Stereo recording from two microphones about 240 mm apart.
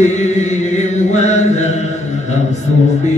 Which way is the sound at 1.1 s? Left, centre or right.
Left.